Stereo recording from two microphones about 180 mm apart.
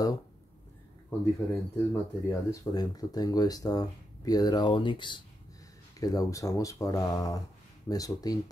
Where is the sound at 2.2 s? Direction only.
20° left (ahead or behind).